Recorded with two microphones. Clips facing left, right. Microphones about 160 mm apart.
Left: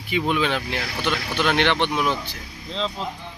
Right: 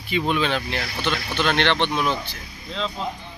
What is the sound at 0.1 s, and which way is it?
Speech, 10° left (ahead or behind).